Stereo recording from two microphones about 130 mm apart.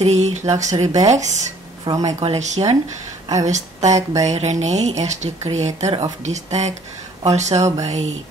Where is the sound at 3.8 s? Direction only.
25° right (ahead or behind).